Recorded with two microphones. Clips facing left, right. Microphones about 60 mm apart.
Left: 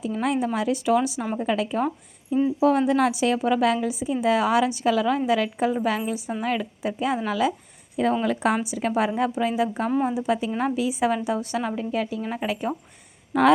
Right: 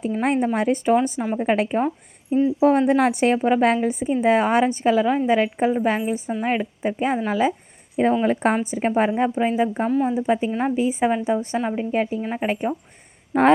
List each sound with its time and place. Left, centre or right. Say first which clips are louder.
0.1 s a woman's voice: right 3 dB; right
3.3 s a woman's voice: right 3 dB; right
3.7 s a woman's voice: right 3 dB; right
9.0 s a woman's voice: right 3 dB; right